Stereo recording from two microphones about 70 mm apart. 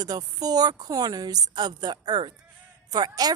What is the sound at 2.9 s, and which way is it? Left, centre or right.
Speech, right.